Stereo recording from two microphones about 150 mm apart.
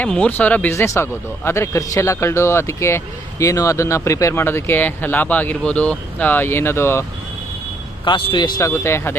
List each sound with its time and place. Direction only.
0.0 s a man's voice: 10° left (ahead or behind)
8.0 s speech: 30° left (ahead or behind)